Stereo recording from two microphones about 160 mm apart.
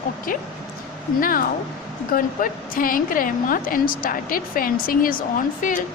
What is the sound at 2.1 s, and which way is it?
Speech, 60° left (ahead or behind).